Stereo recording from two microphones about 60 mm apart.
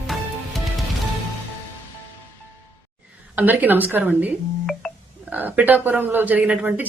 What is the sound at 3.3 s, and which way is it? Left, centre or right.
Speech, right.